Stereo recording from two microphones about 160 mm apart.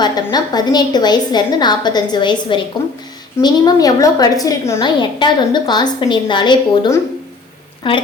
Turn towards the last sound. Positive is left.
turn(degrees=30)  # may be behind; listen again after turning